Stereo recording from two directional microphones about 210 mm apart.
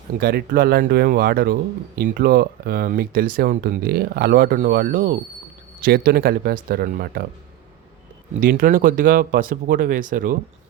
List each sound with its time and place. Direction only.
0.2 s speech: 45° right (ahead or behind)
8.4 s speech: 40° right (ahead or behind)